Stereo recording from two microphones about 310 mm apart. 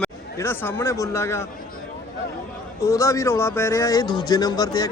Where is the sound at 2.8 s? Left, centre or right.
Centre.